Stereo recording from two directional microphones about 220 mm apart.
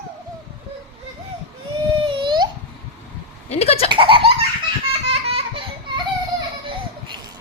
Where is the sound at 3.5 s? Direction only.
25° left (ahead or behind).